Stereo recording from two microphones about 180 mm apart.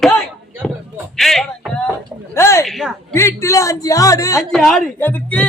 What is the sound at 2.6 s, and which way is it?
Speech, centre (ahead or behind).